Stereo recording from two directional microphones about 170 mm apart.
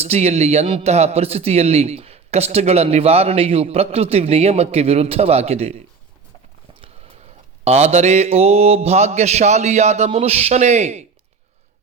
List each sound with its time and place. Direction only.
0.0 s a man's voice: 40° right (ahead or behind)
7.6 s a man's voice: 40° right (ahead or behind)